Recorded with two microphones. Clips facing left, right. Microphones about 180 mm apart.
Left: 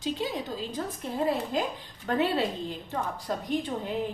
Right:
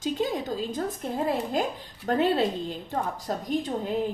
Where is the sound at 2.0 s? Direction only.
45° right (ahead or behind).